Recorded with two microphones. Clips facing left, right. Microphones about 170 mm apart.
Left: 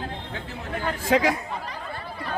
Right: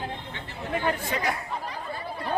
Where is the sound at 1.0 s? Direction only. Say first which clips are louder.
Left 9 dB; 90° left.